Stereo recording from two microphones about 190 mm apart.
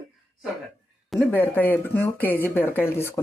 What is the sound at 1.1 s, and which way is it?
Speech, 10° left (ahead or behind).